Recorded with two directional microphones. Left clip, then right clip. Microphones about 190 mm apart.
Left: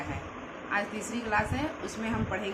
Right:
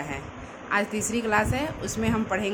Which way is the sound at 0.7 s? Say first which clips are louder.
Right 6 dB; 60° right (ahead or behind).